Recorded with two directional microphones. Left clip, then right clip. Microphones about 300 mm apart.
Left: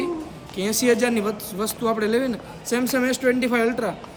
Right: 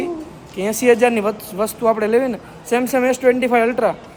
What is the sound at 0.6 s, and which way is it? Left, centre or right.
Speech, centre.